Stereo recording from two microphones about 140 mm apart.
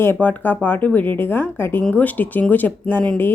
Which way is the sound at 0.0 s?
15° left (ahead or behind).